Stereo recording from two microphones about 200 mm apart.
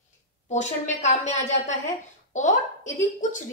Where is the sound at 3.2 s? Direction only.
35° left (ahead or behind).